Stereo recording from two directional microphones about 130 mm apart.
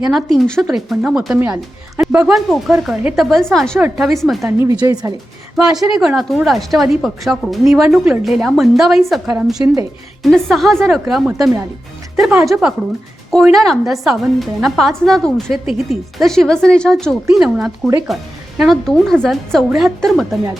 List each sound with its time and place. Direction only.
0.0 s a woman's voice: centre (ahead or behind)
4.7 s a woman's voice: 30° right (ahead or behind)
5.5 s a woman's voice: 5° right (ahead or behind)